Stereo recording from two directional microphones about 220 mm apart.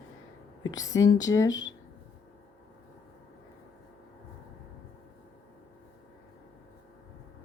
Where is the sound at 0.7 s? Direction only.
15° left (ahead or behind).